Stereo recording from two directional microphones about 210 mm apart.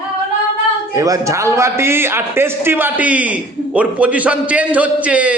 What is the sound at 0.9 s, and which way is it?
A man's voice, 15° right (ahead or behind).